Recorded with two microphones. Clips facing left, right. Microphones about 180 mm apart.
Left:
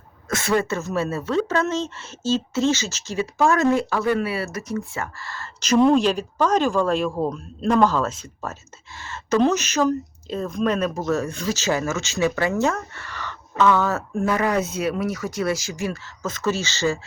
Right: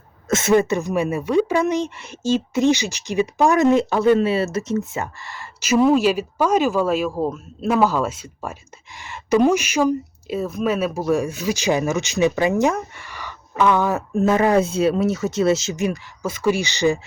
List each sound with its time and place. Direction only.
0.3 s a woman's voice: 20° right (ahead or behind)